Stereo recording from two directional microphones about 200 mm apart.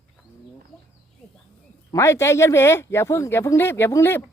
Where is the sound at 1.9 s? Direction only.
15° left (ahead or behind).